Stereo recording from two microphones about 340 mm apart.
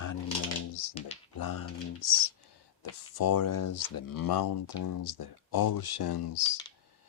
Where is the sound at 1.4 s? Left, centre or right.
Left.